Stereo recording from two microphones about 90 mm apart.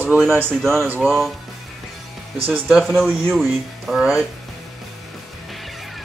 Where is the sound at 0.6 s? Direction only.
Centre (ahead or behind).